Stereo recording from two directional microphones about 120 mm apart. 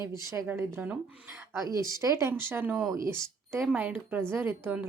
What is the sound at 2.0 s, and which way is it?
Speech, 25° right (ahead or behind).